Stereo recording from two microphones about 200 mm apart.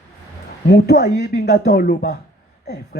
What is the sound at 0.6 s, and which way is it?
Speech, 55° left (ahead or behind).